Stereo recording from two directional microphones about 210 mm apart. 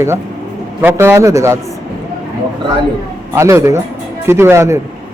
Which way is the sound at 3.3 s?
15° right (ahead or behind).